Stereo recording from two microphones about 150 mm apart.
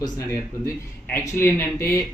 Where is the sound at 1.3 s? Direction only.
15° left (ahead or behind).